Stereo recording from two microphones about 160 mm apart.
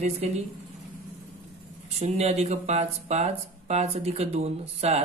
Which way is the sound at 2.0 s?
40° right (ahead or behind).